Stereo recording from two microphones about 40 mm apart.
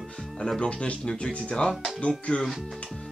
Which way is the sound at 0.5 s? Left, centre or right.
Left.